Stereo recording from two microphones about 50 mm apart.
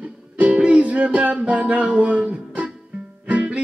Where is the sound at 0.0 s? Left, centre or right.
Right.